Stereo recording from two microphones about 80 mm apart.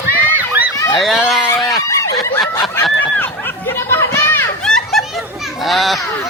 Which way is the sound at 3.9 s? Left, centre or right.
Left.